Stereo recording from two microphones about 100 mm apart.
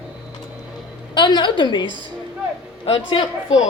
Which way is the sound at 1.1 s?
50° left (ahead or behind).